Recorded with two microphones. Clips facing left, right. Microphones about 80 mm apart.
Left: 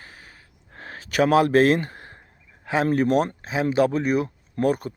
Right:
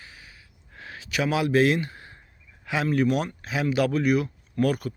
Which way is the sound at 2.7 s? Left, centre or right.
Left.